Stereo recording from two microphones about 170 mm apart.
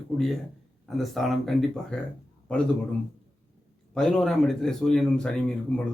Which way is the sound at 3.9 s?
5° left (ahead or behind).